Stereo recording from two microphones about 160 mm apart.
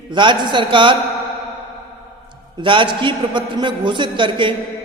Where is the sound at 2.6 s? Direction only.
30° right (ahead or behind).